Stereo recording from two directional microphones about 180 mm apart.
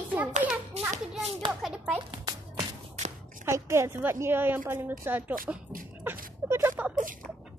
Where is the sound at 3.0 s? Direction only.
40° right (ahead or behind).